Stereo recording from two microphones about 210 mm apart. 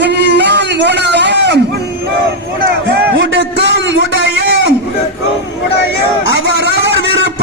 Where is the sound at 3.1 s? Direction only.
60° right (ahead or behind).